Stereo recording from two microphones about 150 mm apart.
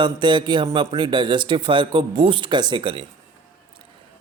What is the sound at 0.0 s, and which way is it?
A man's voice, 30° right (ahead or behind).